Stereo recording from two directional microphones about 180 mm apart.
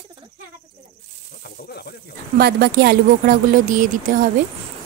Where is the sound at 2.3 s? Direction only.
60° right (ahead or behind).